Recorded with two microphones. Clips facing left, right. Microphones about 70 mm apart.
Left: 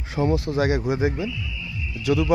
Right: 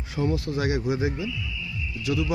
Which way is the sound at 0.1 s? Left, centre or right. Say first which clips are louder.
Left 4 dB; left.